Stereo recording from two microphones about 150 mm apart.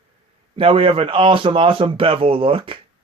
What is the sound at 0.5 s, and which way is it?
A man's voice, 35° right (ahead or behind).